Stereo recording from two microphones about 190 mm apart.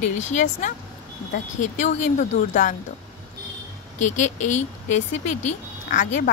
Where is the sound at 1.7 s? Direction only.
40° left (ahead or behind).